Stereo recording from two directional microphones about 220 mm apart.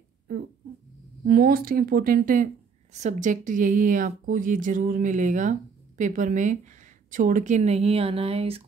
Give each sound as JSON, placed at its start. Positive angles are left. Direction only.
{"t": 1.2, "sound": "speech", "side_deg": -45}